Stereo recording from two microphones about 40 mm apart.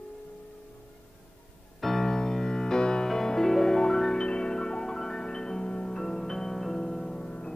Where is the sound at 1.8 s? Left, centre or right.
Centre.